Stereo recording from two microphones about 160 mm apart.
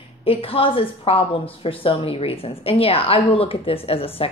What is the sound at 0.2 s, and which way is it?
Speech, 35° left (ahead or behind).